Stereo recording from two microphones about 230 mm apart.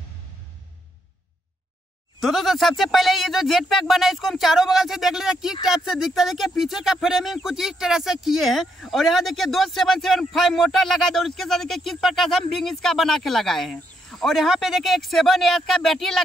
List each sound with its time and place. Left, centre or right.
2.2 s speech: centre